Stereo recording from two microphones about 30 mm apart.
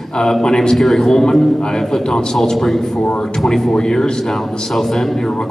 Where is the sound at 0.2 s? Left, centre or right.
Left.